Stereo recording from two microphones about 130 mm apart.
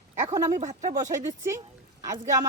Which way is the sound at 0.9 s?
25° right (ahead or behind).